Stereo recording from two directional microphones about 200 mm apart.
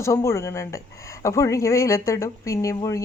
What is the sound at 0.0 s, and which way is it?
Speech, 15° left (ahead or behind).